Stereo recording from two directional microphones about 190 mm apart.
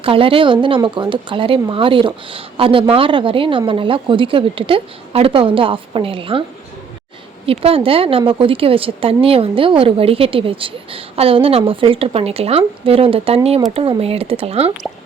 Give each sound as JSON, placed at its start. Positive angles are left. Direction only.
{"t": 0.0, "sound": "speech", "side_deg": -30}
{"t": 7.4, "sound": "speech", "side_deg": -30}